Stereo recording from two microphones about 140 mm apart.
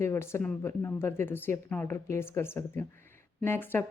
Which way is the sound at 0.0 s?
20° left (ahead or behind).